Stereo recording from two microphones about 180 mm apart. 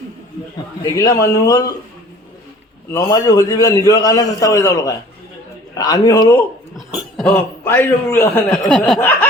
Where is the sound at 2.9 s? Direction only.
20° left (ahead or behind).